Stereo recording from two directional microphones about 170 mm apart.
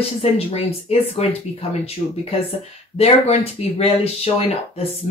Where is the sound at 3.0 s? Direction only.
35° left (ahead or behind).